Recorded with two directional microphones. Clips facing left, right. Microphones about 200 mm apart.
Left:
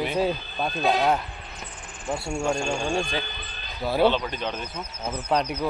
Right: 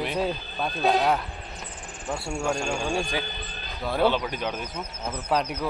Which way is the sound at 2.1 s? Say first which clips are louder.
Left 2 dB; 10° left (ahead or behind).